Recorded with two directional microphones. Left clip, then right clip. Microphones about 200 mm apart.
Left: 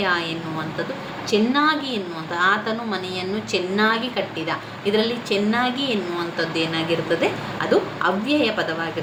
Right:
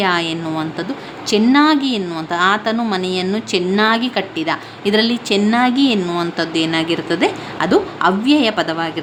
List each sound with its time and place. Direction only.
0.0 s a woman's voice: 55° right (ahead or behind)